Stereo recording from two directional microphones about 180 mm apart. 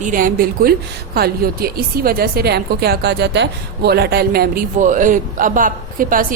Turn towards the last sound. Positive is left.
turn(degrees=-50)  # may be behind; listen again after turning